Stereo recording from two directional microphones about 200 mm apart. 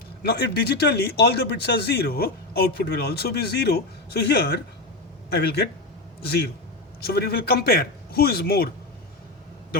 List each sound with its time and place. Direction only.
0.2 s speech: 55° left (ahead or behind)